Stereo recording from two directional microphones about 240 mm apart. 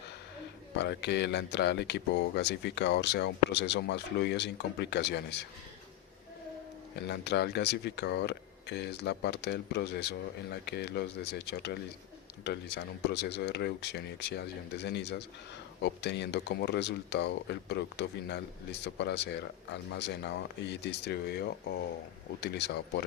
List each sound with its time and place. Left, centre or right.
0.8 s speech: left
6.9 s speech: left